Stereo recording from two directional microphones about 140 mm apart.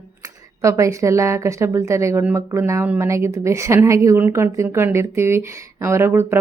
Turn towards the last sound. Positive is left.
turn(degrees=-15)  # may be behind; listen again after turning